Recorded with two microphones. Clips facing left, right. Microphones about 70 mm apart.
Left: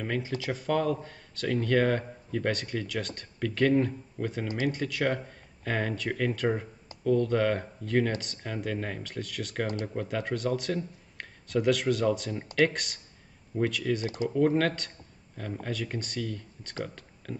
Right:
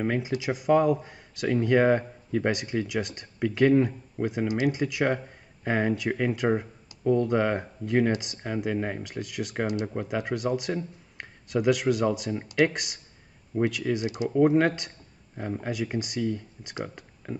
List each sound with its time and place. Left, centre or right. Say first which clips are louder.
0.0 s speech: right 4 dB; centre